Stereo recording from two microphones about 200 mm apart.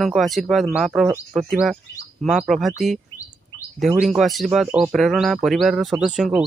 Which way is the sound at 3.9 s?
5° right (ahead or behind).